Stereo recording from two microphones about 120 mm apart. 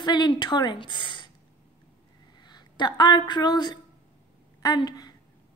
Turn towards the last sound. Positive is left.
turn(degrees=35)  # may be behind; listen again after turning